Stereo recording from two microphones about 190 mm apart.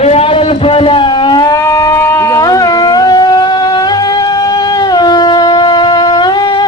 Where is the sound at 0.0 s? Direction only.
35° left (ahead or behind).